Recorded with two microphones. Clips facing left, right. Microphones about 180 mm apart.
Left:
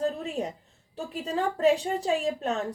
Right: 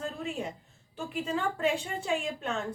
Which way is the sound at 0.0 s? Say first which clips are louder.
Left 6 dB; 35° left (ahead or behind).